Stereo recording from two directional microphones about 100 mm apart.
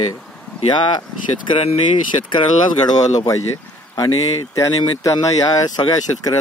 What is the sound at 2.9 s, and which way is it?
Speech, 40° left (ahead or behind).